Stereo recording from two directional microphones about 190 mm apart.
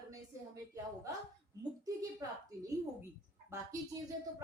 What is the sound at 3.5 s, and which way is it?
Speech, 15° right (ahead or behind).